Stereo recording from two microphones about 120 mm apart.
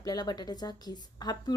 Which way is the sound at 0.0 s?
35° left (ahead or behind).